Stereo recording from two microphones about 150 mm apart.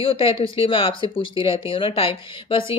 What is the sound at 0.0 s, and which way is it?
Speech, 35° left (ahead or behind).